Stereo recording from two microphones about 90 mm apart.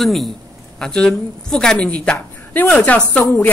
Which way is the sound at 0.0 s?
Centre (ahead or behind).